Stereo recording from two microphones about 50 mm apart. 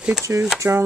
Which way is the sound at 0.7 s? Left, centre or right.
Right.